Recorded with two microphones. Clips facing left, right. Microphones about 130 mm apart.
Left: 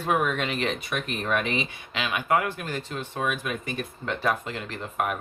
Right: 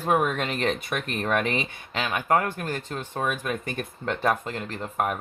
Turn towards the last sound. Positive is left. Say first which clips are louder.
# right 1 dB
turn(degrees=-40)  # may be behind; listen again after turning